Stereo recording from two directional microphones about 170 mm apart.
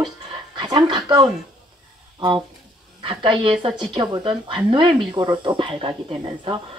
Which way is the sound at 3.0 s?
30° right (ahead or behind).